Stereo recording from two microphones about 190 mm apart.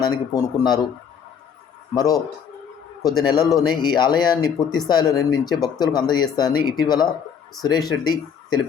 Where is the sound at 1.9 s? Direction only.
20° left (ahead or behind).